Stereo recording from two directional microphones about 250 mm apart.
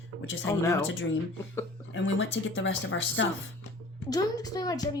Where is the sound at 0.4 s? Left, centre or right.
Centre.